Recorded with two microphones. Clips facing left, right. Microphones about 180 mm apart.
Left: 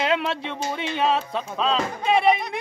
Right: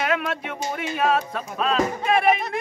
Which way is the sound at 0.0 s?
25° left (ahead or behind).